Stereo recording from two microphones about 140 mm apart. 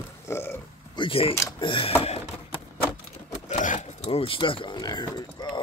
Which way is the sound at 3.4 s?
60° left (ahead or behind).